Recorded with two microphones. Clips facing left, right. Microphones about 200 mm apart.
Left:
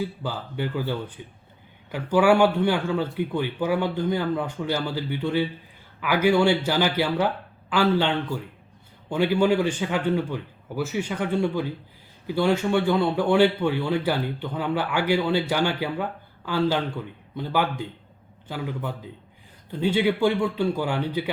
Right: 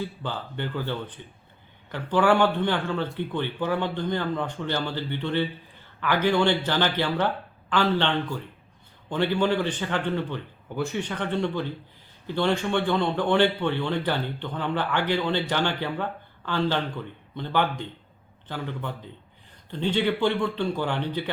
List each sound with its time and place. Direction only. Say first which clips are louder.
0.0 s a man's voice: left 2 dB; 5° left (ahead or behind)